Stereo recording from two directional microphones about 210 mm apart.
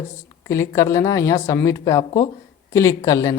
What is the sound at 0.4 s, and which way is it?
Speech, 15° left (ahead or behind).